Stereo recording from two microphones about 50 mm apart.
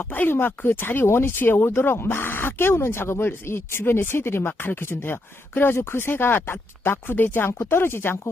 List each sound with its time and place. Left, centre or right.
0.0 s speech: left